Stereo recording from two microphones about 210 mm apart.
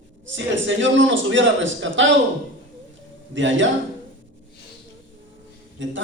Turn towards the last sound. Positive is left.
turn(degrees=-60)  # may be behind; listen again after turning